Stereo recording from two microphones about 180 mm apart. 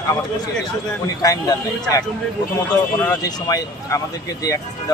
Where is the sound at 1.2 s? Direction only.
20° left (ahead or behind).